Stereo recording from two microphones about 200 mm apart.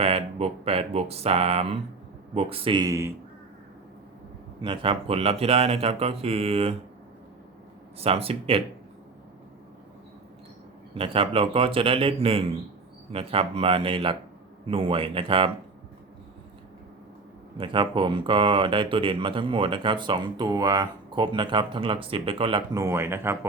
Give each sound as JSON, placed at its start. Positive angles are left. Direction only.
{"t": 0.0, "sound": "speech", "side_deg": -30}
{"t": 4.6, "sound": "speech", "side_deg": -25}
{"t": 7.9, "sound": "speech", "side_deg": -30}
{"t": 10.9, "sound": "speech", "side_deg": -25}
{"t": 17.6, "sound": "speech", "side_deg": -25}